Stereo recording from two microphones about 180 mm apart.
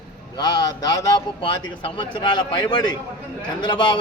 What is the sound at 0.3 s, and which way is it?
A man's voice, 20° left (ahead or behind).